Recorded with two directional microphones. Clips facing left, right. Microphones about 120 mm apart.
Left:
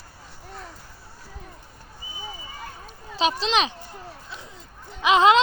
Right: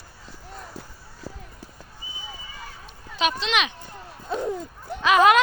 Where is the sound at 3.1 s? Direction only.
30° left (ahead or behind).